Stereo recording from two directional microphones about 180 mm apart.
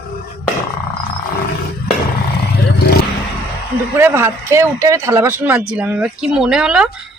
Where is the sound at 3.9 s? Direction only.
15° right (ahead or behind).